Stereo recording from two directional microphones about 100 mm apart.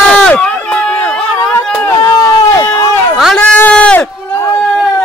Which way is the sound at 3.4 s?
15° left (ahead or behind).